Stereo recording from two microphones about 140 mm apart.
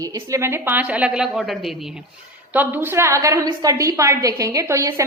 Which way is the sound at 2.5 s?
15° right (ahead or behind).